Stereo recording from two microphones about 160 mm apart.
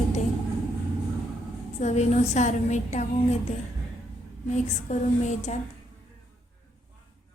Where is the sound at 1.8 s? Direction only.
45° left (ahead or behind).